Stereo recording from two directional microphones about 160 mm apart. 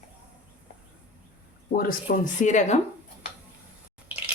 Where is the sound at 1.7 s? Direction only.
70° left (ahead or behind); by 2.7 s 50° left (ahead or behind).